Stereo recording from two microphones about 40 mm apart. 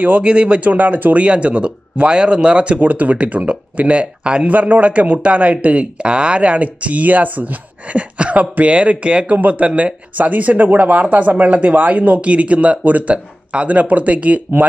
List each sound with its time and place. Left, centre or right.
0.0 s speech: right
0.7 s speech: right
1.1 s a man's voice: right
4.5 s a man's voice: right
12.2 s a man's voice: right